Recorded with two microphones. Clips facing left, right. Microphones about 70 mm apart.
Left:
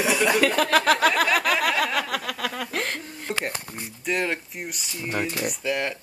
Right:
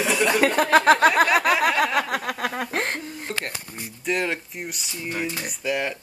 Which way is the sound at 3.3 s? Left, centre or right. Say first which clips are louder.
Left 2 dB; centre.